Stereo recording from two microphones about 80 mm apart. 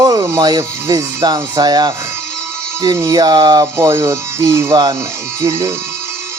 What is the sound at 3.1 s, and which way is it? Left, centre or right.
Speech, right.